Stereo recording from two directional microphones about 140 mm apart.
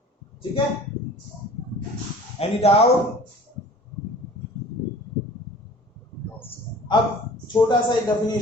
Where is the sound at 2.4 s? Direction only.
45° left (ahead or behind).